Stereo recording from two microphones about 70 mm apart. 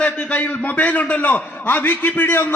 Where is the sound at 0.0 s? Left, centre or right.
Centre.